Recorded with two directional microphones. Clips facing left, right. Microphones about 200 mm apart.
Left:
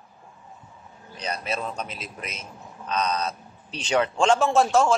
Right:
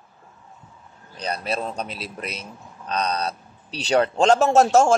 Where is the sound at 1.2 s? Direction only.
35° right (ahead or behind).